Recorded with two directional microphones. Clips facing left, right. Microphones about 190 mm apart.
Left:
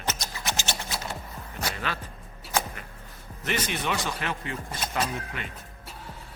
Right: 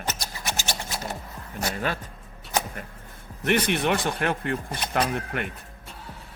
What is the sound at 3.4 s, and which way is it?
Speech, 60° right (ahead or behind).